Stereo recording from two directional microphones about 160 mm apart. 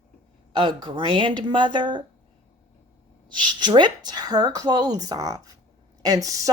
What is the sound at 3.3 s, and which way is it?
Speech, 30° right (ahead or behind).